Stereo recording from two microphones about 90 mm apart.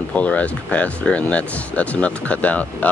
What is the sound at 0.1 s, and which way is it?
Speech, 15° left (ahead or behind).